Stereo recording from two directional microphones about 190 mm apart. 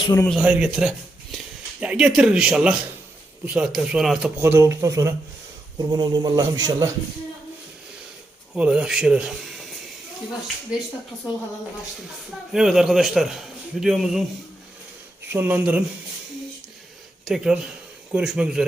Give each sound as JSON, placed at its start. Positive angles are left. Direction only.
{"t": 0.0, "sound": "speech", "side_deg": 15}
{"t": 0.3, "sound": "a man's voice", "side_deg": -5}
{"t": 8.5, "sound": "a man's voice", "side_deg": -5}
{"t": 12.5, "sound": "a man's voice", "side_deg": 0}
{"t": 15.3, "sound": "speech", "side_deg": -10}
{"t": 17.2, "sound": "a man's voice", "side_deg": -5}